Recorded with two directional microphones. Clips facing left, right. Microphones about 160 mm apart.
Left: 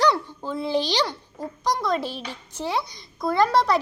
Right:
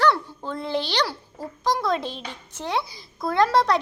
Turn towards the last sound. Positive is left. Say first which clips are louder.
# even
turn(degrees=0)  # may be behind; listen again after turning